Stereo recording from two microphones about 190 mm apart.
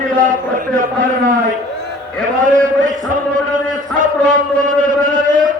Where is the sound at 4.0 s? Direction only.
45° right (ahead or behind).